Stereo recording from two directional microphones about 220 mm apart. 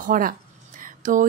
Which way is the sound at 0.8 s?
35° right (ahead or behind).